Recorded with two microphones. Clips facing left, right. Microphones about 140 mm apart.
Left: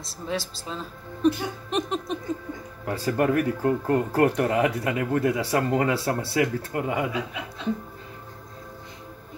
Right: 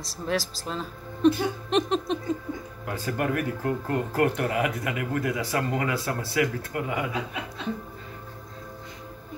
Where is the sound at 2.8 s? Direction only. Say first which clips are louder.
Left 6 dB; 30° left (ahead or behind).